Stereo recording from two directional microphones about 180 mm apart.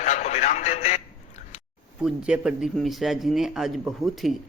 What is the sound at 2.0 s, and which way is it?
Speech, 5° right (ahead or behind).